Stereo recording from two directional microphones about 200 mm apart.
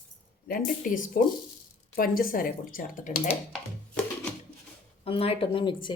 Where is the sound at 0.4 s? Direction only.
45° left (ahead or behind).